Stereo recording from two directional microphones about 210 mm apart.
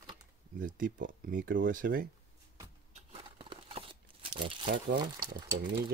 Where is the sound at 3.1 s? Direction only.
25° right (ahead or behind).